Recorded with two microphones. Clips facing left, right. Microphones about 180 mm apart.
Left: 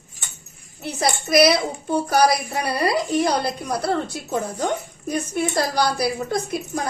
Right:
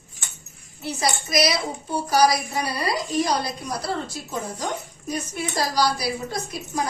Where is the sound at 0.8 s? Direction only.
60° left (ahead or behind).